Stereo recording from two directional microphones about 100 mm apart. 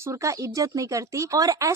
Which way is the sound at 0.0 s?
30° right (ahead or behind).